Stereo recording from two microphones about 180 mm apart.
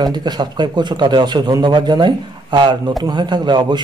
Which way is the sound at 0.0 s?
25° right (ahead or behind).